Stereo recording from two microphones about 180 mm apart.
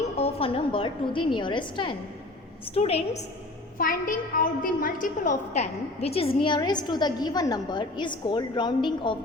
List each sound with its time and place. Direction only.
0.2 s a woman's voice: 30° left (ahead or behind)
3.8 s a woman's voice: 50° left (ahead or behind)
5.5 s a woman's voice: 35° left (ahead or behind)